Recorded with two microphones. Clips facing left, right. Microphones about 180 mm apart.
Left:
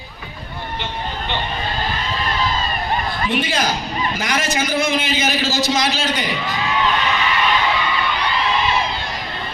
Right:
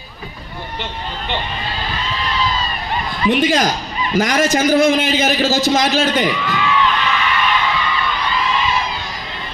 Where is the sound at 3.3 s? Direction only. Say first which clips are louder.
Right 7 dB; 45° right (ahead or behind).